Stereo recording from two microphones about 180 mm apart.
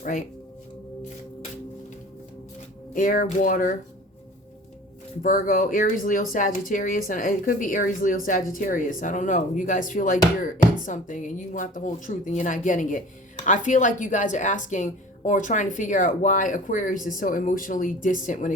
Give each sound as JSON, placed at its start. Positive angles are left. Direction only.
{"t": 0.0, "sound": "speech", "side_deg": 45}
{"t": 2.9, "sound": "a woman's voice", "side_deg": 50}
{"t": 5.2, "sound": "a woman's voice", "side_deg": 50}